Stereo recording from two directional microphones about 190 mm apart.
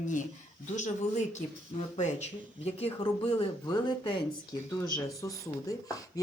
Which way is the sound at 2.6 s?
30° left (ahead or behind).